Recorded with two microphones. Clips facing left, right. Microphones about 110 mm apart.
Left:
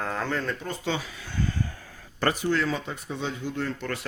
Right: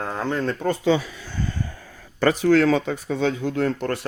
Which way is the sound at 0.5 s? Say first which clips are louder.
Right 11 dB; 60° right (ahead or behind).